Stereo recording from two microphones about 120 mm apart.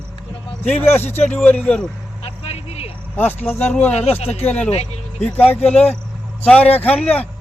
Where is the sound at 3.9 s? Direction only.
60° left (ahead or behind).